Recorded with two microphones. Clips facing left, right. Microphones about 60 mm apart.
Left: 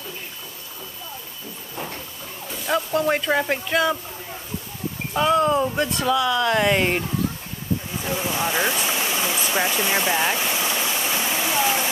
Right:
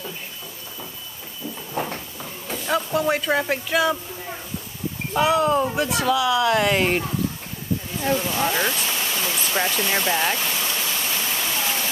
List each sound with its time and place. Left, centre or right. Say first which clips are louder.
2.6 s speech: left 1 dB; centre
5.1 s speech: even; centre
8.0 s a sound: right 5 dB; centre